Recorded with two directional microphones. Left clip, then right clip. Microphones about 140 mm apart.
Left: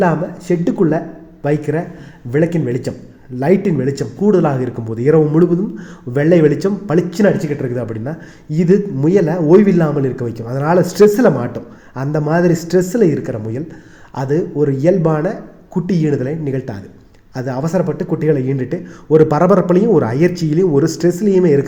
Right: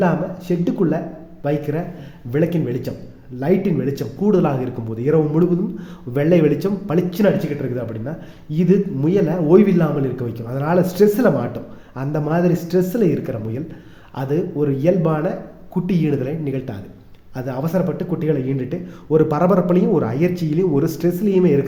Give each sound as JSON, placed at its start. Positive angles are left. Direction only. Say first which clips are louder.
{"t": 0.0, "sound": "a man's voice", "louder": "left 4 dB", "side_deg": 40}